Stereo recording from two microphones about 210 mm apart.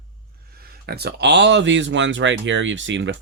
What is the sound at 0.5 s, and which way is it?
Speech, 45° right (ahead or behind).